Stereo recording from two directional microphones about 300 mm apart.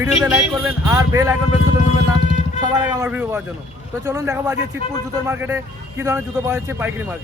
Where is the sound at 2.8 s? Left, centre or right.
Centre.